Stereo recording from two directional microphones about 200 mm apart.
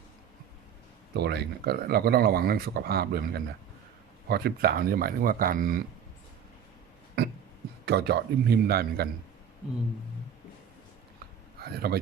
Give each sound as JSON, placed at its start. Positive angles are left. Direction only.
{"t": 1.1, "sound": "speech", "side_deg": -55}
{"t": 7.9, "sound": "speech", "side_deg": -55}
{"t": 11.6, "sound": "speech", "side_deg": -50}